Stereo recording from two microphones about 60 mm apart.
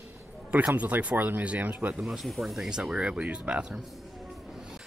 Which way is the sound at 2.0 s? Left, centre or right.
Centre.